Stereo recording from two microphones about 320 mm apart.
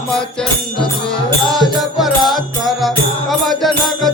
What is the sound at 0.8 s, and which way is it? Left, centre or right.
Music, centre.